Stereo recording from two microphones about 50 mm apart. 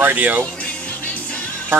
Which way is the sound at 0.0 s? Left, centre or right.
Right.